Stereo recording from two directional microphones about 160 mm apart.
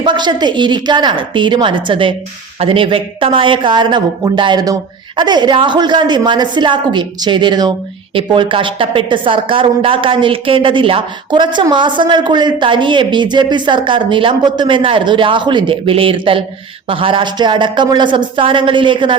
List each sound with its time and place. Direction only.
0.0 s a man's voice: 30° right (ahead or behind)